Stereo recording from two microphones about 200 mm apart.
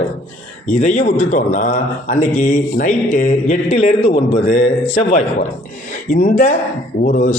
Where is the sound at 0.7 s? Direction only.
40° left (ahead or behind).